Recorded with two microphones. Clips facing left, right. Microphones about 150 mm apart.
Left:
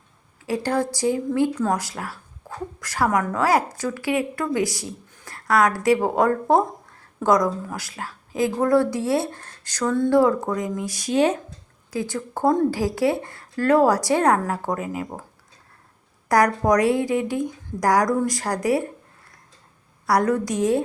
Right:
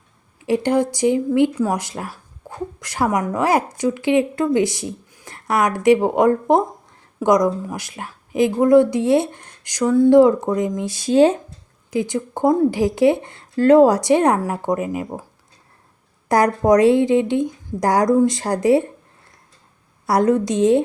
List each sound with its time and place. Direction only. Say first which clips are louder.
0.4 s speech: right 5 dB; 20° right (ahead or behind)
1.5 s speech: right 2 dB; 10° right (ahead or behind)
1.8 s speech: right 3 dB; 25° right (ahead or behind)
11.9 s speech: right 5 dB; 20° right (ahead or behind)
16.3 s speech: right 3 dB; 25° right (ahead or behind)
20.1 s speech: right 4 dB; 25° right (ahead or behind)